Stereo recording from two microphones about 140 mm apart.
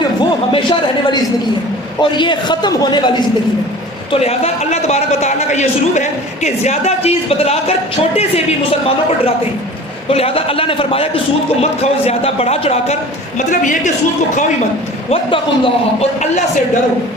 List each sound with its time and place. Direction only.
0.0 s a sound: 35° left (ahead or behind)
2.0 s a man's voice: 35° left (ahead or behind)
4.1 s a man's voice: 45° left (ahead or behind)
10.1 s a man's voice: 45° left (ahead or behind)
13.5 s a woman's voice: 65° left (ahead or behind)
15.1 s a man's voice: 40° left (ahead or behind)